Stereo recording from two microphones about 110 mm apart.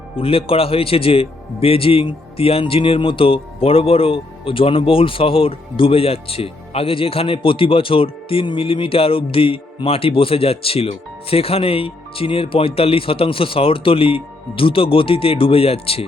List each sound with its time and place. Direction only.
0.2 s a man's voice: 55° left (ahead or behind)